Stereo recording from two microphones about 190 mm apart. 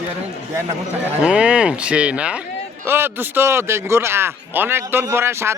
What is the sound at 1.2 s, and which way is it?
A man's voice, 5° right (ahead or behind).